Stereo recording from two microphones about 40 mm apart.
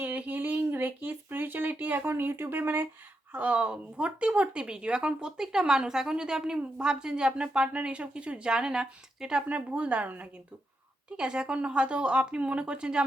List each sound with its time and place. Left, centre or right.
0.0 s a sound: right
2.0 s speech: right
2.6 s speech: right
3.3 s speech: right; by 9.4 s centre
9.5 s speech: right
11.2 s speech: right